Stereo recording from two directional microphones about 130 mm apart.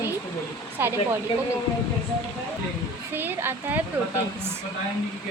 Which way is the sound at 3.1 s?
15° right (ahead or behind).